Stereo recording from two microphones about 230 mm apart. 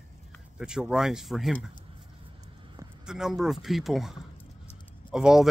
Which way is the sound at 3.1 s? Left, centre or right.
Centre.